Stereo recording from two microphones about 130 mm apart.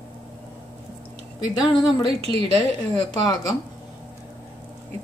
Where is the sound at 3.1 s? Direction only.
30° left (ahead or behind).